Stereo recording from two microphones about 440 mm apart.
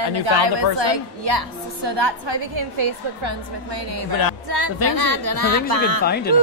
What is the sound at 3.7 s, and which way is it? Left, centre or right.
A woman's voice, right.